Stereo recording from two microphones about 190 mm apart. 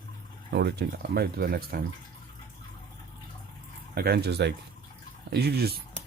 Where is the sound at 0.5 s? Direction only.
60° right (ahead or behind).